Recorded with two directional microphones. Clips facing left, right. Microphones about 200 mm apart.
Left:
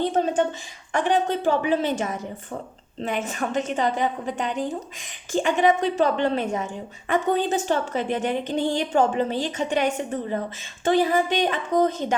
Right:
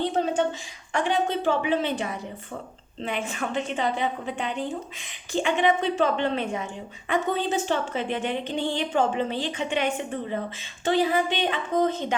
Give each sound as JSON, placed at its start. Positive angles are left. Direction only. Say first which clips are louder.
{"t": 0.2, "sound": "a woman's voice", "louder": "left 2 dB", "side_deg": 45}